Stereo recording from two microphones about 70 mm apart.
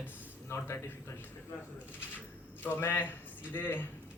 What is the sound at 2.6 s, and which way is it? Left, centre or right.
A man's voice, left.